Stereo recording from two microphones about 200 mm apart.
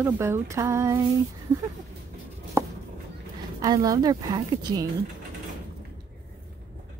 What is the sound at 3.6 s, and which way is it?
A woman's voice, 20° right (ahead or behind).